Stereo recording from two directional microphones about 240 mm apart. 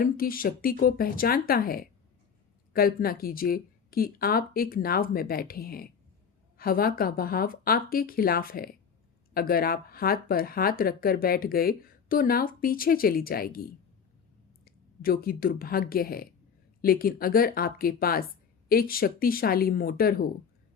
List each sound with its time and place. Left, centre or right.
0.0 s speech: left